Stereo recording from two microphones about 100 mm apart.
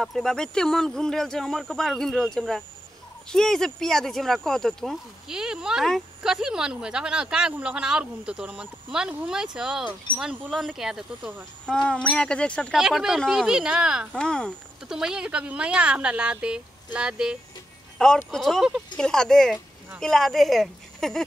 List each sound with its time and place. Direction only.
0.0 s a woman's voice: centre (ahead or behind); by 10.5 s 15° right (ahead or behind)
10.7 s speech: 5° right (ahead or behind)
11.6 s speech: 10° left (ahead or behind)
12.7 s speech: 5° right (ahead or behind)
14.1 s speech: 10° left (ahead or behind)
14.9 s a woman's voice: 5° right (ahead or behind)
17.9 s speech: 5° left (ahead or behind)